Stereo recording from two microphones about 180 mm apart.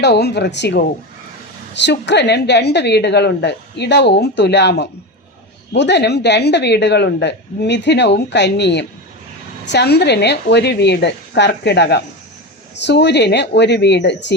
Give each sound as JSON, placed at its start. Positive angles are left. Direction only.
{"t": 0.0, "sound": "a woman's voice", "side_deg": 70}